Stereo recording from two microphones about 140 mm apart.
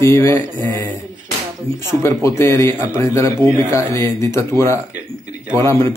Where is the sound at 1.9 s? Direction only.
20° left (ahead or behind).